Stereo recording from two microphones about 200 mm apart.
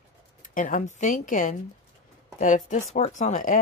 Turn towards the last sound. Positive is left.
turn(degrees=40)  # may be behind; listen again after turning